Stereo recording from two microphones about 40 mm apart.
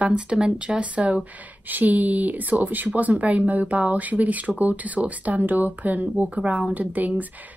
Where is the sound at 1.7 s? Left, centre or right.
Right.